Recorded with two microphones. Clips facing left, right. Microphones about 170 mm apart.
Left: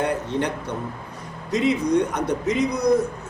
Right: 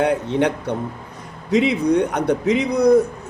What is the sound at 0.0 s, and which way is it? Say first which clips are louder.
A man's voice: right 5 dB; 65° right (ahead or behind).